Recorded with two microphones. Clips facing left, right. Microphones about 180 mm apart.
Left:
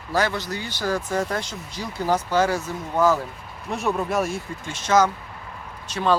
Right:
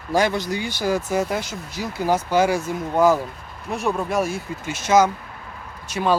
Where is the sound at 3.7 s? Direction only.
Centre (ahead or behind).